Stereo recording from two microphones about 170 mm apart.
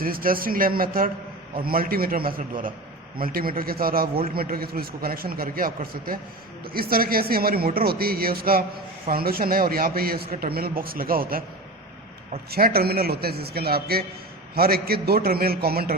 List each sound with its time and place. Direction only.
0.0 s a man's voice: 60° right (ahead or behind)
12.5 s a man's voice: 65° right (ahead or behind)